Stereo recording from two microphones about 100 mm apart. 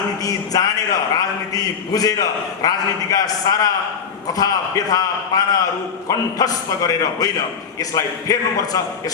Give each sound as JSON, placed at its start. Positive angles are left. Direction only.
{"t": 0.2, "sound": "a man's voice", "side_deg": 35}